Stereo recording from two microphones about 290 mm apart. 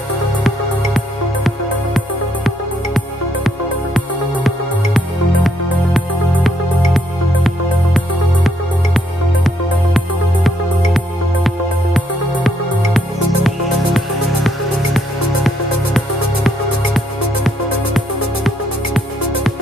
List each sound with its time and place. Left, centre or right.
2.0 s music: centre
8.5 s music: centre